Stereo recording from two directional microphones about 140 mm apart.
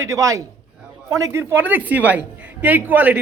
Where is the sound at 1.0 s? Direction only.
25° right (ahead or behind).